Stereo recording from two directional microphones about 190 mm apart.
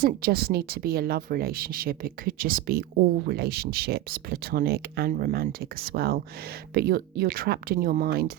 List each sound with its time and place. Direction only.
0.0 s speech: 55° right (ahead or behind)